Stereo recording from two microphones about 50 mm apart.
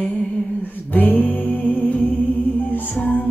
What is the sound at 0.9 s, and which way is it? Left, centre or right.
Music, left.